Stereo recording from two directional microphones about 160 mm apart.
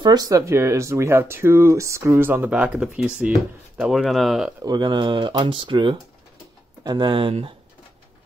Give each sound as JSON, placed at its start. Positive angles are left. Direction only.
{"t": 0.0, "sound": "speech", "side_deg": -25}
{"t": 4.6, "sound": "speech", "side_deg": -25}